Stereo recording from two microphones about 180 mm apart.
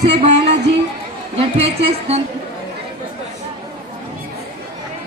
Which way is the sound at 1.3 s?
35° right (ahead or behind).